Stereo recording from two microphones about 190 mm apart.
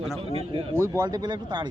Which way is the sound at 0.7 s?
15° right (ahead or behind).